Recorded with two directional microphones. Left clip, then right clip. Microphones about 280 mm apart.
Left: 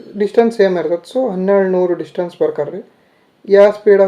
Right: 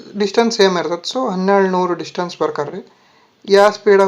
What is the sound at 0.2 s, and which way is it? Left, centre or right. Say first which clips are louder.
Speech: left 2 dB; centre.